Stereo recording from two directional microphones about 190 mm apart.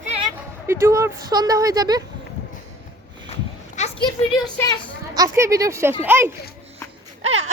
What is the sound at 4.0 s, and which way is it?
Speech, 20° left (ahead or behind).